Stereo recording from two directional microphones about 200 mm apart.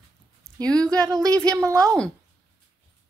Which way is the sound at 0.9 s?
20° right (ahead or behind).